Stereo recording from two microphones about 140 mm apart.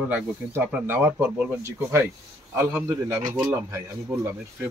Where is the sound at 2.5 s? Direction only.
15° right (ahead or behind).